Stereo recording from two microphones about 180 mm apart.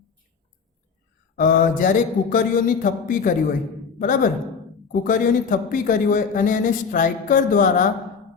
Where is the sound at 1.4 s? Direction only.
50° left (ahead or behind).